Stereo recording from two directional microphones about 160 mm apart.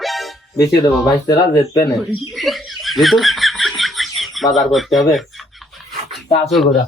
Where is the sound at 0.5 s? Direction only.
20° left (ahead or behind).